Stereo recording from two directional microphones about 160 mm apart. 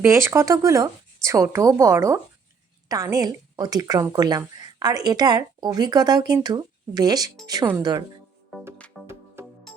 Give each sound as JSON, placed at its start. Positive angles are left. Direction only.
{"t": 0.0, "sound": "a woman's voice", "side_deg": -15}
{"t": 9.0, "sound": "music", "side_deg": -15}